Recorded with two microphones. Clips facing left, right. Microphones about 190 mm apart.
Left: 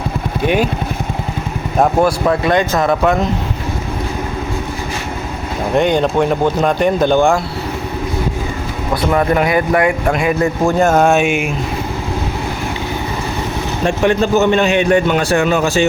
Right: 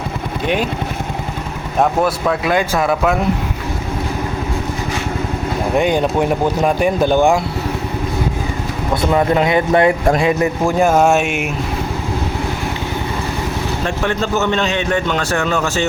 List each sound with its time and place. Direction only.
0.4 s speech: 5° left (ahead or behind)
1.8 s speech: centre (ahead or behind)
5.7 s speech: 10° right (ahead or behind)
9.0 s speech: 20° right (ahead or behind)
10.8 s speech: 10° right (ahead or behind)
13.8 s a man's voice: 15° left (ahead or behind)